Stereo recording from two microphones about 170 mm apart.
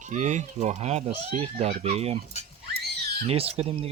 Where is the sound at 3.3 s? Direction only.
35° right (ahead or behind).